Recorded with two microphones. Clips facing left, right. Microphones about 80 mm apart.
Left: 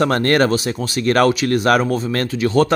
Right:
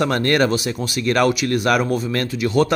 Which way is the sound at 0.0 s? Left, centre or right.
Left.